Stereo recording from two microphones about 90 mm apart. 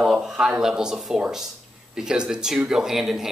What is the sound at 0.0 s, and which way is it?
Speech, 5° right (ahead or behind).